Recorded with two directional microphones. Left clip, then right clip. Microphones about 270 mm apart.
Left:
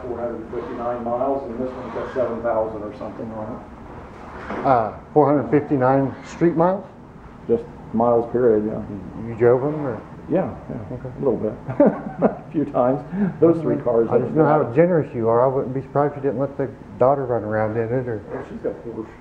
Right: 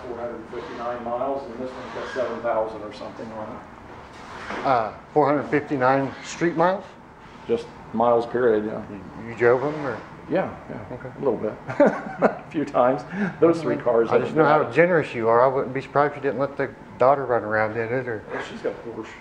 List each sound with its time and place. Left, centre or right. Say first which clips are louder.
0.1 s a man's voice: left 5 dB; centre
4.5 s a man's voice: left 3 dB; centre